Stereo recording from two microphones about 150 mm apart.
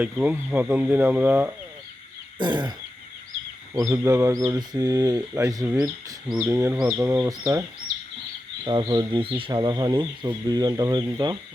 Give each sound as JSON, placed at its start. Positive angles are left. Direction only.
{"t": 0.0, "sound": "speech", "side_deg": -10}
{"t": 2.4, "sound": "speech", "side_deg": -30}
{"t": 3.8, "sound": "speech", "side_deg": -20}
{"t": 8.6, "sound": "speech", "side_deg": -30}